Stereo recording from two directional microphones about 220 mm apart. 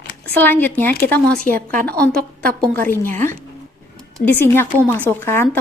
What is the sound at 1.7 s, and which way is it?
Speech, 45° right (ahead or behind).